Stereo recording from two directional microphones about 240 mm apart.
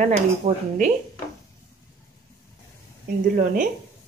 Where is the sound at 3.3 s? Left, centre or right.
Right.